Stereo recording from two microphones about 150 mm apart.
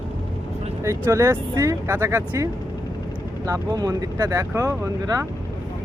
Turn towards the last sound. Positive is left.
turn(degrees=-20)  # may be behind; listen again after turning